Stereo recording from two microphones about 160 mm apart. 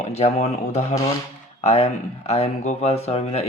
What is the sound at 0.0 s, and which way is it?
Speech, 40° left (ahead or behind).